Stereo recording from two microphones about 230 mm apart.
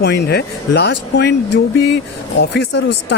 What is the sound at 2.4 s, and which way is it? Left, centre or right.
Speech, left.